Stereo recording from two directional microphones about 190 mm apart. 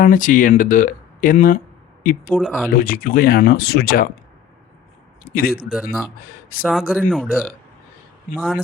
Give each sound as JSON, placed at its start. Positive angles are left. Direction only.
{"t": 0.0, "sound": "speech", "side_deg": 45}
{"t": 2.4, "sound": "speech", "side_deg": 0}
{"t": 2.6, "sound": "speech", "side_deg": 50}
{"t": 5.2, "sound": "speech", "side_deg": 50}
{"t": 5.6, "sound": "speech", "side_deg": -5}